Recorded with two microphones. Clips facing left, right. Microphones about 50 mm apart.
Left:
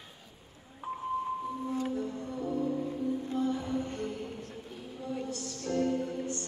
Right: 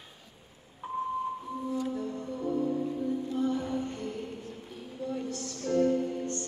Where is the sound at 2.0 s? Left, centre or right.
Centre.